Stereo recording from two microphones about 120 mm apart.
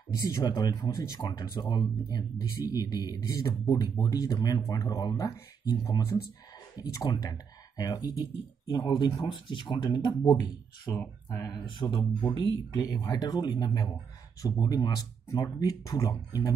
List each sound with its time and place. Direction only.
0.3 s speech: 30° left (ahead or behind)
11.0 s speech: 20° left (ahead or behind)
11.5 s speech: 45° left (ahead or behind)
12.0 s speech: 25° left (ahead or behind)